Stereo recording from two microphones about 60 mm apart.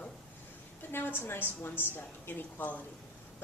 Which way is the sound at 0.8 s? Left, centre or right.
Left.